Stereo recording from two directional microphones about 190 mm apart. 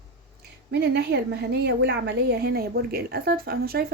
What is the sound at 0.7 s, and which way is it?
A woman's voice, 65° right (ahead or behind).